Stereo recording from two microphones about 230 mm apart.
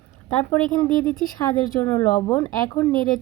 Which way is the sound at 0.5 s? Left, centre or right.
Centre.